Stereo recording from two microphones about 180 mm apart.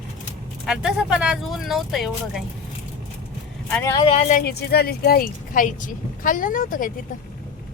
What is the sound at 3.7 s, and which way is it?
Speech, 10° left (ahead or behind).